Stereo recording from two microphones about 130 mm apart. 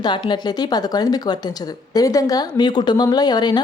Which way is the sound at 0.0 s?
35° left (ahead or behind).